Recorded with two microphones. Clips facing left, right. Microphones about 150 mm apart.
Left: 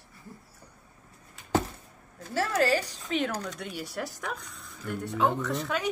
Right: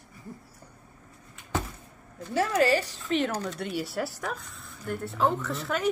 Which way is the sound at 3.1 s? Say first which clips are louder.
Right 3 dB; centre (ahead or behind).